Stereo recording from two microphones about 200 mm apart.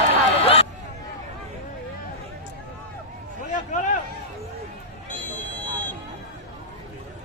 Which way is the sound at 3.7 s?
40° left (ahead or behind).